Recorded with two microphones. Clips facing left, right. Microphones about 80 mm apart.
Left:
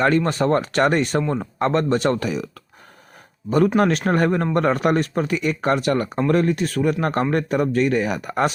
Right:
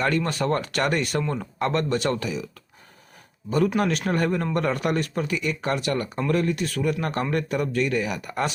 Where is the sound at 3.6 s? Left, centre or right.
Left.